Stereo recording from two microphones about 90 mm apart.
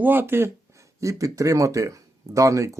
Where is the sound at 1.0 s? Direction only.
35° right (ahead or behind).